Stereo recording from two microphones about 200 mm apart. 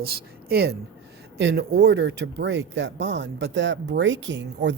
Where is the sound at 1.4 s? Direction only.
65° right (ahead or behind).